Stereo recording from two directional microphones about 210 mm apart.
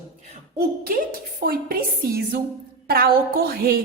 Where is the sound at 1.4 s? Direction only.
45° right (ahead or behind).